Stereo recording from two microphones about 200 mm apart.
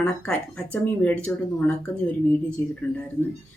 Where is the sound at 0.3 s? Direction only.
5° left (ahead or behind).